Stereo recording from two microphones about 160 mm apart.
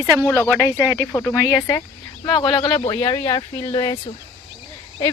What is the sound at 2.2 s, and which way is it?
Speech, 30° left (ahead or behind).